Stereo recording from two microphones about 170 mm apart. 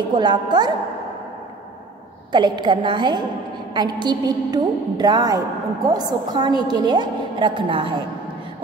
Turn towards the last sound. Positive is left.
turn(degrees=-30)  # may be behind; listen again after turning